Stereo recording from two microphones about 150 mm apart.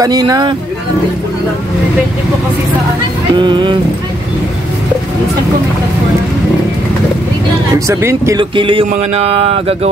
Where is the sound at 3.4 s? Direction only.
30° right (ahead or behind).